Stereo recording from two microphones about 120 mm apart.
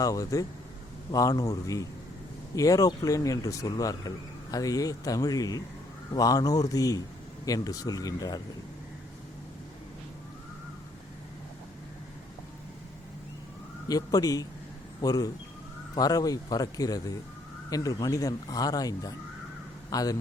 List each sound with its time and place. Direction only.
0.0 s a man's voice: 30° left (ahead or behind)
13.8 s speech: 30° left (ahead or behind)